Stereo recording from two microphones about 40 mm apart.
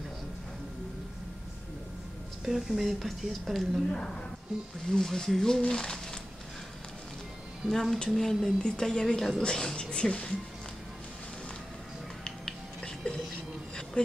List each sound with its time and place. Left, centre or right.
2.4 s speech: centre
3.9 s speech: centre
7.6 s speech: centre
8.5 s speech: centre
12.3 s music: centre
14.0 s speech: left